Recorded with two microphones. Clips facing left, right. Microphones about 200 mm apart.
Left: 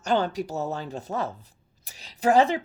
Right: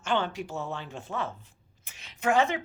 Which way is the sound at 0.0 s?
40° left (ahead or behind).